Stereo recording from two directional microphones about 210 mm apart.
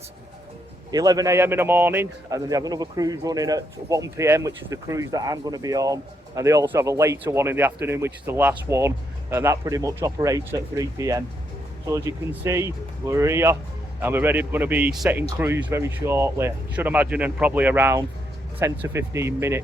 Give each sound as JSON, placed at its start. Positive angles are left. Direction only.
{"t": 0.9, "sound": "a man's voice", "side_deg": -20}